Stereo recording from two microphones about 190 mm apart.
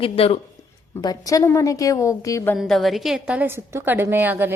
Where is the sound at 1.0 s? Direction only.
20° left (ahead or behind).